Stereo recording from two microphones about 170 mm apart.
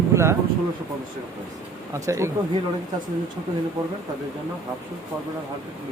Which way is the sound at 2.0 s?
20° right (ahead or behind).